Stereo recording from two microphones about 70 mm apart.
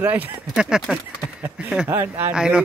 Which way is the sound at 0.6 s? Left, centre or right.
Centre.